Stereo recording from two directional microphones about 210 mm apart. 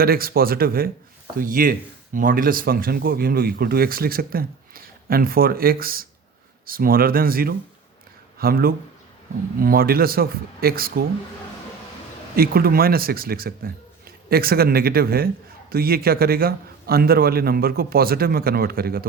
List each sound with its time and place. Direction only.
0.0 s speech: 45° right (ahead or behind)
12.4 s speech: 45° right (ahead or behind)